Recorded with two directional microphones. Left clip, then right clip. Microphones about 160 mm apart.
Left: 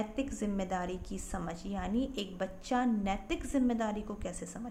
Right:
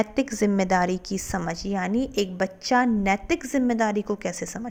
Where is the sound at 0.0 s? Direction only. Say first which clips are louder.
Right 13 dB; 55° right (ahead or behind).